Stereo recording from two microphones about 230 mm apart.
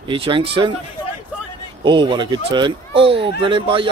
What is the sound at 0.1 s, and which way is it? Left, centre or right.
Speech, right.